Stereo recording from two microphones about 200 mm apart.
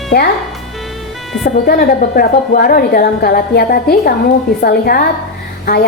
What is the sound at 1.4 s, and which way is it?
A woman's voice, 50° left (ahead or behind).